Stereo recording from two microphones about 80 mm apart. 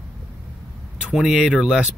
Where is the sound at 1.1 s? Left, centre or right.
Centre.